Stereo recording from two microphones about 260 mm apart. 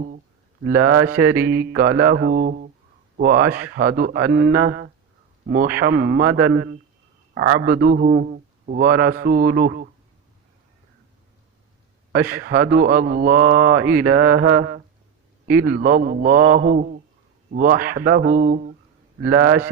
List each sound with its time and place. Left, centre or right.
0.7 s a man's voice: right
7.6 s a man's voice: right
12.1 s a man's voice: right
19.2 s a man's voice: right